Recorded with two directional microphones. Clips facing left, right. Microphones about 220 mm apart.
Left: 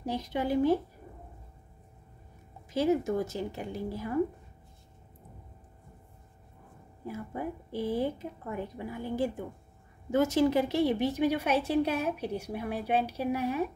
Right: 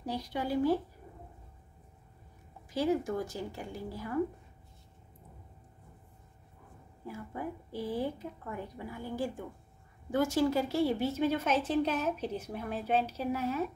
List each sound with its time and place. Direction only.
0.0 s a woman's voice: 20° left (ahead or behind)
2.7 s a woman's voice: 20° left (ahead or behind)
8.0 s a woman's voice: 25° left (ahead or behind)